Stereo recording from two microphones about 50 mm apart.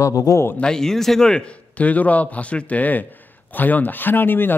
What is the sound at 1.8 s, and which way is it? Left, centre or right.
A man's voice, left.